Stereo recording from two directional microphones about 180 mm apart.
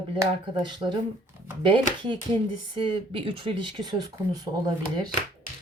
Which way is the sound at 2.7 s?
30° right (ahead or behind).